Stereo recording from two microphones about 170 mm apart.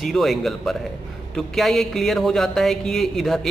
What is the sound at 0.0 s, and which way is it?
A man's voice, centre (ahead or behind).